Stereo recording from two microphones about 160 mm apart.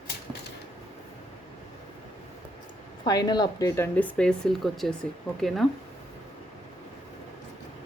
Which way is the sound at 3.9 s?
5° left (ahead or behind).